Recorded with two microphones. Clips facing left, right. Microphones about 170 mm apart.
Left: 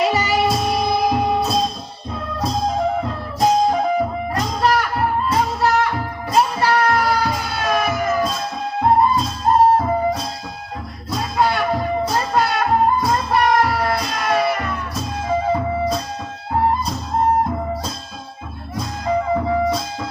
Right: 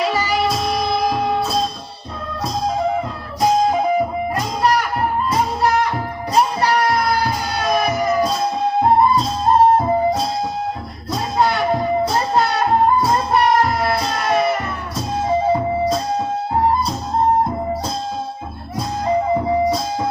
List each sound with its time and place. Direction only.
0.9 s music: 20° left (ahead or behind)
6.6 s music: 15° right (ahead or behind)
7.7 s emergency vehicle: 15° right (ahead or behind)
14.3 s music: 20° right (ahead or behind)